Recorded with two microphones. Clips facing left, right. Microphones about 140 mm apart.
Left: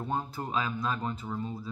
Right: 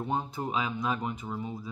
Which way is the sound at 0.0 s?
20° right (ahead or behind).